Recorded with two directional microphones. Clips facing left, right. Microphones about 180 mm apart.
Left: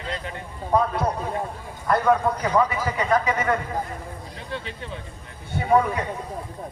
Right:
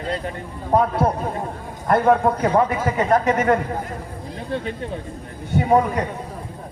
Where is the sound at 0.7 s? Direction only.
50° right (ahead or behind).